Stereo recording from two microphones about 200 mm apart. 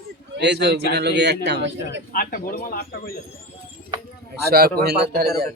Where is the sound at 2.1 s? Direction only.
45° left (ahead or behind).